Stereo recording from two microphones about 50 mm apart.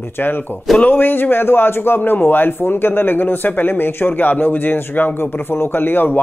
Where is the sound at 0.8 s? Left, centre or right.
Left.